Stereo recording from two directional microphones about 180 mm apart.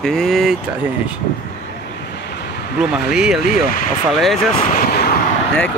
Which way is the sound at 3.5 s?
50° left (ahead or behind).